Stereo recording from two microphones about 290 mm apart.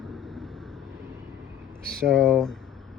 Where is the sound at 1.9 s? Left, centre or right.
Centre.